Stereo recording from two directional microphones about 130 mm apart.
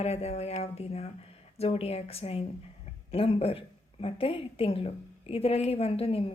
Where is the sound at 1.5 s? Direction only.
50° left (ahead or behind).